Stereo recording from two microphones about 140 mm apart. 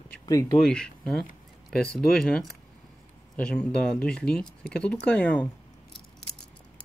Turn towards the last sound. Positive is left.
turn(degrees=10)  # may be behind; listen again after turning